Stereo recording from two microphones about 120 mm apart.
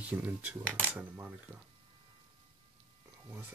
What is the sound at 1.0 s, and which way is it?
Speech, 15° right (ahead or behind).